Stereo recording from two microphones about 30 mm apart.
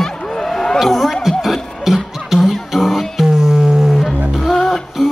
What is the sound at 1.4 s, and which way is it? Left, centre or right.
Music, centre.